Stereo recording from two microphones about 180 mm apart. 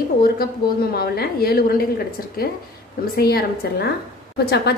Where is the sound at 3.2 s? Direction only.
60° left (ahead or behind).